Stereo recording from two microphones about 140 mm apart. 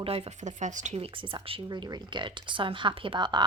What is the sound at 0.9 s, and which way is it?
Speech, 40° right (ahead or behind).